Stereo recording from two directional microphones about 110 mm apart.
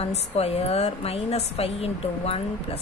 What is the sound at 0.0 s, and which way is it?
A woman's voice, 70° left (ahead or behind).